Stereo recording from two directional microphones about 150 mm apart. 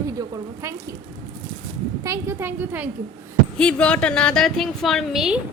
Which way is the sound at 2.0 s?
15° right (ahead or behind).